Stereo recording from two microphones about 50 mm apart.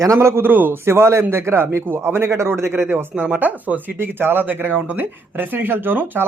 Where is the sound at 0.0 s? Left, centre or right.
Right.